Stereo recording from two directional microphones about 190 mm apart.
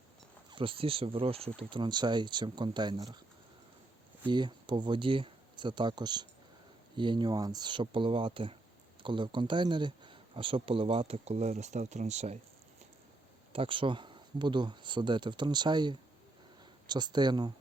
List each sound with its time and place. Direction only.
0.5 s speech: 30° right (ahead or behind)
4.3 s speech: 25° right (ahead or behind)
13.5 s speech: 30° right (ahead or behind)